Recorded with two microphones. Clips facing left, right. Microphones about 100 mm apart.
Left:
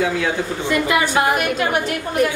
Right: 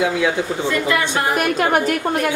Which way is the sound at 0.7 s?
15° left (ahead or behind).